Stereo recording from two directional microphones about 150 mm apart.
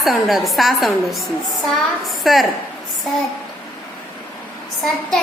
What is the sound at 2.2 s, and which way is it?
Speech, centre (ahead or behind).